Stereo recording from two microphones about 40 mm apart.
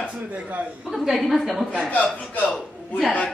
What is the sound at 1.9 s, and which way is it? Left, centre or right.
Speech, left.